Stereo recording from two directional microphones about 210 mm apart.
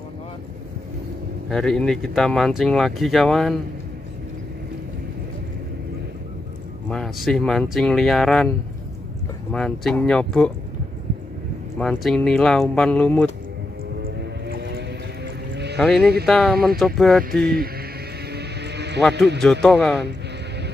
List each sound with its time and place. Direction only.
1.5 s speech: centre (ahead or behind)
6.9 s speech: centre (ahead or behind)
9.5 s speech: 5° left (ahead or behind)
11.8 s speech: centre (ahead or behind)
13.9 s music: 50° right (ahead or behind)
15.5 s a sound: 55° right (ahead or behind)
16.0 s speech: 50° right (ahead or behind)
16.3 s speech: centre (ahead or behind)
17.2 s speech: 45° right (ahead or behind)
18.3 s music: 50° right (ahead or behind)
19.1 s speech: 55° right (ahead or behind)
19.6 s speech: centre (ahead or behind)